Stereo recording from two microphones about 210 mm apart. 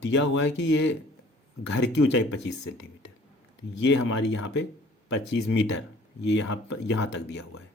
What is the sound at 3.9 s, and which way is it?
Speech, 60° left (ahead or behind).